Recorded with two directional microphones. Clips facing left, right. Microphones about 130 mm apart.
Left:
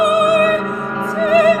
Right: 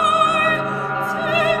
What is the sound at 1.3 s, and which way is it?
Opera, 40° left (ahead or behind).